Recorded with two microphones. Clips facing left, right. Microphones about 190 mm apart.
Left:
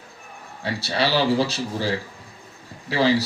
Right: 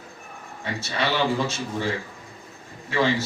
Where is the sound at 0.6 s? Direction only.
35° left (ahead or behind).